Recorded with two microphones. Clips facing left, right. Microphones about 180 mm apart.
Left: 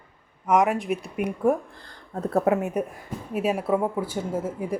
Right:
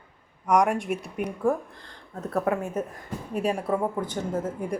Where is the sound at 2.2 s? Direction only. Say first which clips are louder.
Left 4 dB; 25° left (ahead or behind).